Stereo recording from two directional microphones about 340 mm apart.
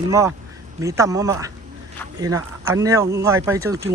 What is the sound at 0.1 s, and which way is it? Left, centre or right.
Speech, centre.